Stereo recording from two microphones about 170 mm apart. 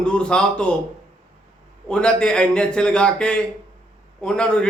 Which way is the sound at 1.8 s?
5° left (ahead or behind).